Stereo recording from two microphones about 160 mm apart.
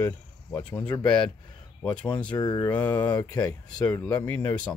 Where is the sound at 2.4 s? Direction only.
25° left (ahead or behind).